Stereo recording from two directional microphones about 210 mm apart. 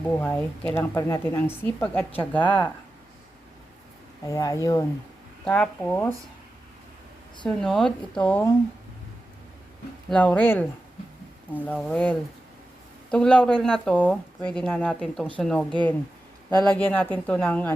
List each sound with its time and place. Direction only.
0.2 s speech: 10° left (ahead or behind)
2.4 s speech: 25° left (ahead or behind)
4.2 s speech: 15° left (ahead or behind)
7.4 s speech: centre (ahead or behind)
10.1 s speech: 5° left (ahead or behind)
16.5 s speech: 20° right (ahead or behind)
16.7 s speech: 10° left (ahead or behind)